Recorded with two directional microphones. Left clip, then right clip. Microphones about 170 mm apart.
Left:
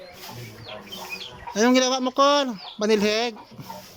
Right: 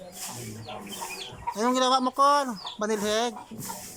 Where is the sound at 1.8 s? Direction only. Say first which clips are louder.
Left 2 dB; 15° left (ahead or behind).